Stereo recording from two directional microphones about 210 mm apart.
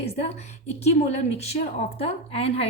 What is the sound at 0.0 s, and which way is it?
A woman's voice, 30° left (ahead or behind).